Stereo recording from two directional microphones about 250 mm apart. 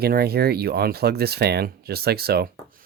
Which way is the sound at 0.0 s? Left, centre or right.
Right.